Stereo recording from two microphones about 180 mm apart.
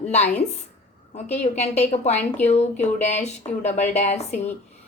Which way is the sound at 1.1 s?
40° left (ahead or behind).